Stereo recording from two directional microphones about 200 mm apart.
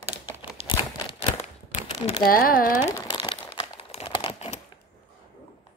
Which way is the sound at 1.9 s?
25° left (ahead or behind).